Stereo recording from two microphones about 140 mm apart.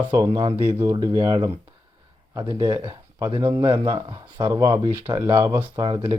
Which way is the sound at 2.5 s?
30° right (ahead or behind).